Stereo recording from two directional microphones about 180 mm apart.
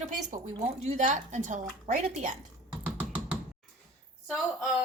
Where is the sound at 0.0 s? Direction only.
40° right (ahead or behind).